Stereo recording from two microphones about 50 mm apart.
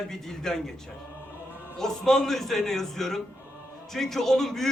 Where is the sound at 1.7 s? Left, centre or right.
Centre.